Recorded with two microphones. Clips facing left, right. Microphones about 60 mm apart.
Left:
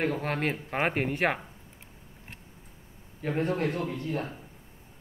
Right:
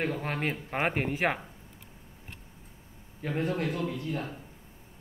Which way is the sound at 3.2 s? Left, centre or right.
Left.